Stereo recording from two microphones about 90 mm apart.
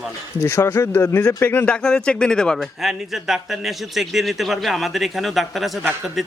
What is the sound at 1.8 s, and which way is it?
A man's voice, 10° left (ahead or behind).